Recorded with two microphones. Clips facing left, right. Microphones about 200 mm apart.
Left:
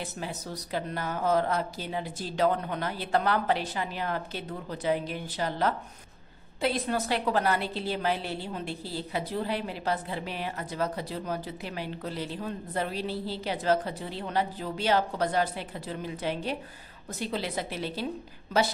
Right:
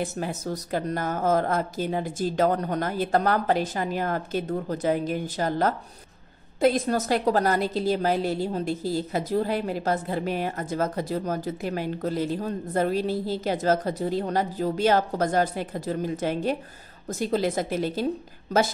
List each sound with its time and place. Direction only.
0.0 s a woman's voice: 45° right (ahead or behind)